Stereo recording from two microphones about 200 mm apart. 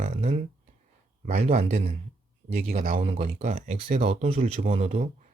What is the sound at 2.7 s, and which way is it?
Speech, 45° right (ahead or behind).